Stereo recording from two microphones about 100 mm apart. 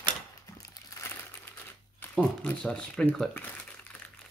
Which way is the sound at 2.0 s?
20° left (ahead or behind).